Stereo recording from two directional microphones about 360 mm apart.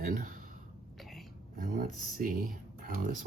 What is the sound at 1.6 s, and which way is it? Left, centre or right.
Speech, right.